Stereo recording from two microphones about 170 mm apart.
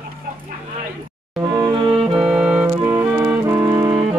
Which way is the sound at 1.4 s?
25° right (ahead or behind).